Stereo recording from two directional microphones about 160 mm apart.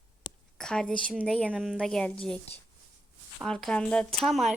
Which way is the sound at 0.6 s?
5° left (ahead or behind).